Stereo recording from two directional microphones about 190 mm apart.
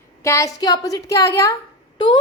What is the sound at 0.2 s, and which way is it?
A woman's voice, 15° left (ahead or behind).